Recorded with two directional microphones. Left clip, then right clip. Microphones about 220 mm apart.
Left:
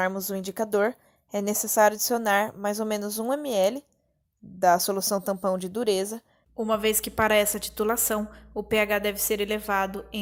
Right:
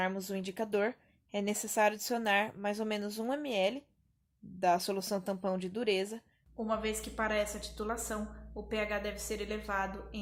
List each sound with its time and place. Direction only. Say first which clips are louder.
0.0 s a woman's voice: left 8 dB; 25° left (ahead or behind)